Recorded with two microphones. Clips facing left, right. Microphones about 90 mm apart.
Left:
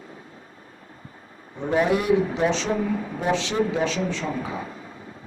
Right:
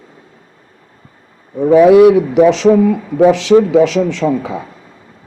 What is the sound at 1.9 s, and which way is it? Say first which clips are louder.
Speech: right 14 dB; 90° right.